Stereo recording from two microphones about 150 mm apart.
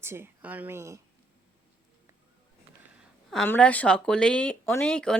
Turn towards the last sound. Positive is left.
turn(degrees=5)  # may be behind; listen again after turning